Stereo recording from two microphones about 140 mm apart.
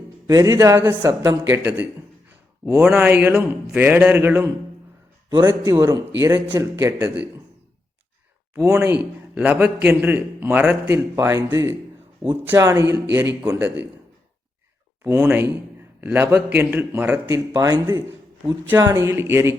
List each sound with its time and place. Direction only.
0.3 s a man's voice: 25° right (ahead or behind)
5.5 s a man's voice: 20° right (ahead or behind)
8.7 s a man's voice: 10° right (ahead or behind)
15.0 s a man's voice: 15° right (ahead or behind)